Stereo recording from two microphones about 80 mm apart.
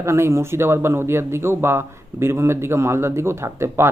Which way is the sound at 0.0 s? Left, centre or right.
Right.